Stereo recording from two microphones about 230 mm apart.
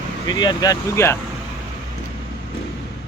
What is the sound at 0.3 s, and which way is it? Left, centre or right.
Speech, centre.